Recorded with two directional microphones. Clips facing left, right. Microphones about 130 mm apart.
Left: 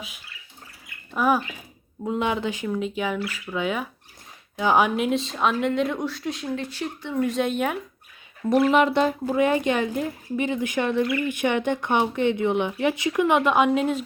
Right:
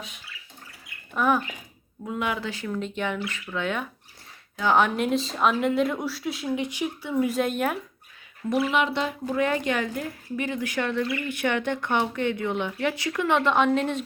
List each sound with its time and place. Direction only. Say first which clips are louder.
1.1 s speech: left 2 dB; 5° left (ahead or behind)
2.0 s speech: left 4 dB; 25° left (ahead or behind)
4.9 s speech: left 1 dB; centre (ahead or behind)
6.6 s speech: right 2 dB; 15° right (ahead or behind)
8.7 s speech: left 6 dB; 45° left (ahead or behind)
9.2 s a woman's voice: left 4 dB; 20° left (ahead or behind)